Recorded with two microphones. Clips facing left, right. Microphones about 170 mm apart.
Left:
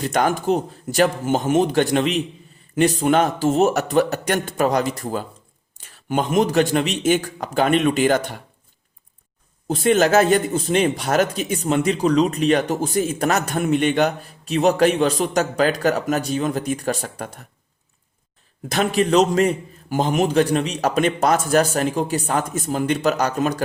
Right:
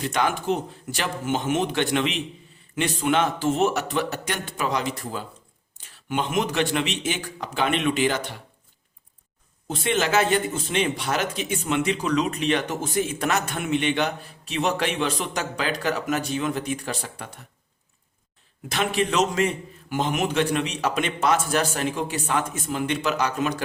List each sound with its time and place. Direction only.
0.0 s speech: 45° left (ahead or behind)
9.6 s speech: 40° left (ahead or behind)
18.7 s speech: 40° left (ahead or behind)